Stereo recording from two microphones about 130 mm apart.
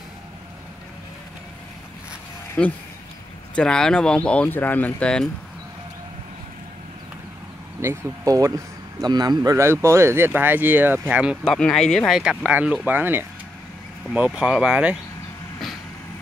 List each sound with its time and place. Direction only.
2.6 s speech: 5° left (ahead or behind)
7.8 s speech: 20° right (ahead or behind)
11.4 s speech: 5° left (ahead or behind)